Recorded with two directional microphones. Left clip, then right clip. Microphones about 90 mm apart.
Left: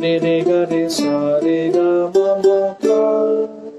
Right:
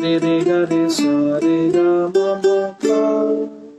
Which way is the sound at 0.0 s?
25° right (ahead or behind).